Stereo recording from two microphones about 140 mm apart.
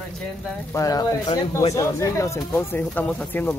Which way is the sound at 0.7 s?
25° left (ahead or behind).